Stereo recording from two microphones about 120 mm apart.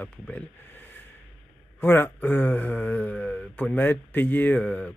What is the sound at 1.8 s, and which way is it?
Speech, 20° left (ahead or behind).